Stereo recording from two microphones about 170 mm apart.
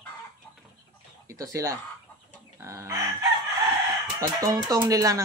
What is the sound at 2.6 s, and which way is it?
Chicken, 15° right (ahead or behind).